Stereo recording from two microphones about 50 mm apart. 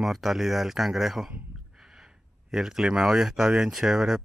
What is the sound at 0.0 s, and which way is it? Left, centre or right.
Speech, centre.